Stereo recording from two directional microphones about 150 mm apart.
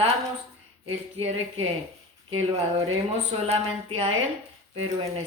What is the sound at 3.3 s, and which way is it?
A woman's voice, 40° right (ahead or behind).